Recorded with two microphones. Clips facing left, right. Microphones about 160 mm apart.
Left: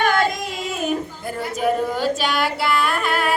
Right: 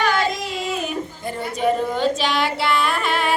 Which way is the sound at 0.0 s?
50° left (ahead or behind).